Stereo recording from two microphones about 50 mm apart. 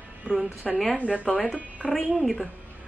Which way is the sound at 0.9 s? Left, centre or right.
Left.